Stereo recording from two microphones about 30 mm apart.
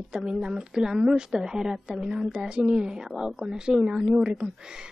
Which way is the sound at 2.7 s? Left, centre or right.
Right.